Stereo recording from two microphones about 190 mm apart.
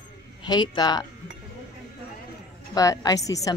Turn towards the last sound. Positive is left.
turn(degrees=20)  # may be behind; listen again after turning